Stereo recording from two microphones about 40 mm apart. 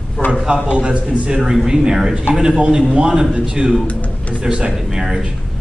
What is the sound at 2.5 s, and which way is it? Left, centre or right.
A man's voice, right.